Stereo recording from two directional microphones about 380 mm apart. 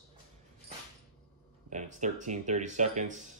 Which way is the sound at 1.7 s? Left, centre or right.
Centre.